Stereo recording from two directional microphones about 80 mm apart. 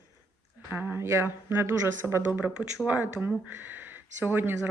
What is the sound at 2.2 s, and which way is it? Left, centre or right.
Speech, centre.